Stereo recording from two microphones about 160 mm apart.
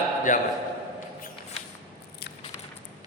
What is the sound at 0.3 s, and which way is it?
Speech, 55° left (ahead or behind).